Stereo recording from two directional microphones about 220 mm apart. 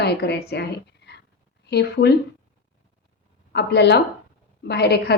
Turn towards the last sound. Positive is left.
turn(degrees=50)  # may be behind; listen again after turning